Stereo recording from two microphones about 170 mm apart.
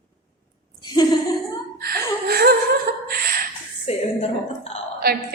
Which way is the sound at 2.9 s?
55° right (ahead or behind).